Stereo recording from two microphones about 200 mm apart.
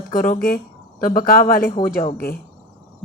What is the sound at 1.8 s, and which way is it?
Speech, 20° left (ahead or behind).